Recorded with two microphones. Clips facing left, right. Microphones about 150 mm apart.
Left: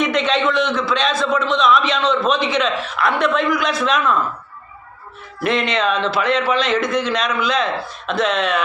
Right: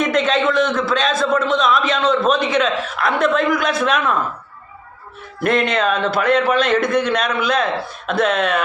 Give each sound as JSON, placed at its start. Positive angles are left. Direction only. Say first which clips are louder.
{"t": 0.0, "sound": "a man's voice", "louder": "right 1 dB", "side_deg": -45}
{"t": 5.4, "sound": "a man's voice", "louder": "right 2 dB", "side_deg": -50}